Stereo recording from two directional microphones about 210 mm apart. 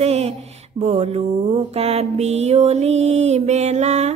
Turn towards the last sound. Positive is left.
turn(degrees=-30)  # may be behind; listen again after turning